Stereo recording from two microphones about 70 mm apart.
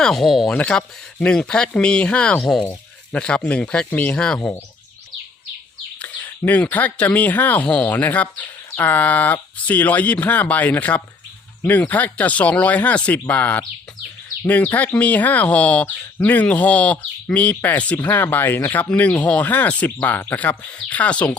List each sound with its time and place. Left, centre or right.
0.0 s speech: centre
0.5 s speech: centre
2.4 s speech: centre
2.6 s speech: centre
4.4 s speech: left
6.0 s speech: left